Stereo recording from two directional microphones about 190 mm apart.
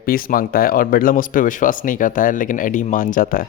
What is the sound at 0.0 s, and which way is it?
Speech, 50° left (ahead or behind).